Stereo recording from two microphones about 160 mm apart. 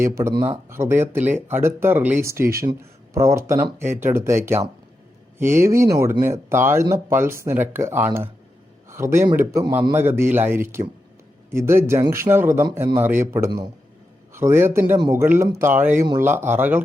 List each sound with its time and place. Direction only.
0.0 s speech: 15° right (ahead or behind)
14.9 s speech: 25° right (ahead or behind)